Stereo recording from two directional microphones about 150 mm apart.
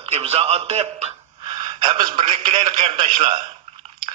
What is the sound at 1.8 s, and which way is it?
A man's voice, 35° right (ahead or behind).